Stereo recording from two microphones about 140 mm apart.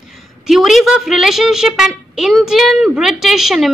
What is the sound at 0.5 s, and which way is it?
A woman's voice, centre (ahead or behind).